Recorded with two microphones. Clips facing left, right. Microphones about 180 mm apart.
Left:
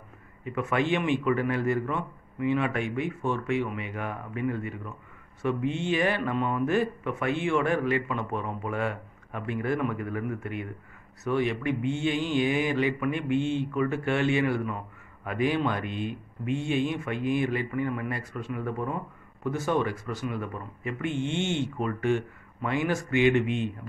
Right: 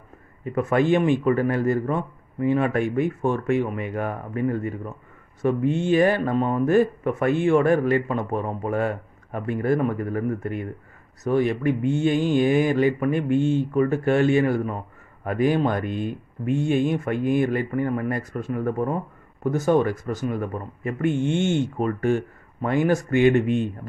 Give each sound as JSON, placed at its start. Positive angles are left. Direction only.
{"t": 0.5, "sound": "speech", "side_deg": -40}